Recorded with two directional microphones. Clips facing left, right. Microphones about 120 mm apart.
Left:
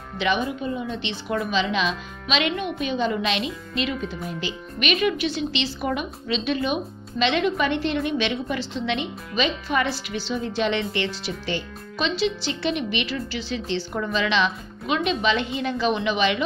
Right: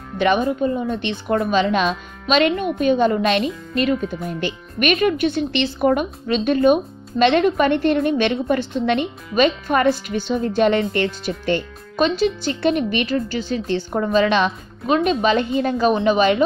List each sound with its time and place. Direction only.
0.2 s a woman's voice: 45° right (ahead or behind)